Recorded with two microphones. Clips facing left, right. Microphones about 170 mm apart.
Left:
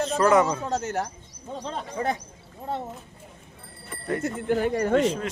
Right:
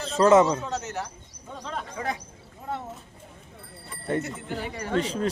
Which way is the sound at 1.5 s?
30° left (ahead or behind).